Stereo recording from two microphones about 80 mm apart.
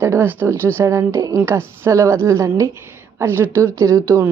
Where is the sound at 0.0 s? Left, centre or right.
Right.